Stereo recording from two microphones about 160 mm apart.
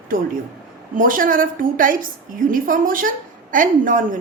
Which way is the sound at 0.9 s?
60° right (ahead or behind).